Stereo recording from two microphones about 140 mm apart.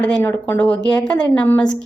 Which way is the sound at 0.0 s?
15° left (ahead or behind).